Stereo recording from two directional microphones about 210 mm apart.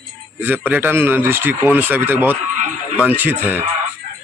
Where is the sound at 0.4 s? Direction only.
10° right (ahead or behind).